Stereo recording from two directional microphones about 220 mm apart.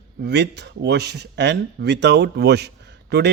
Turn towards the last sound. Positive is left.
turn(degrees=-50)  # may be behind; listen again after turning